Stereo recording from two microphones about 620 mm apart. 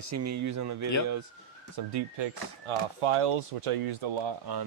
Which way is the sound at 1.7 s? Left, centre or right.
Right.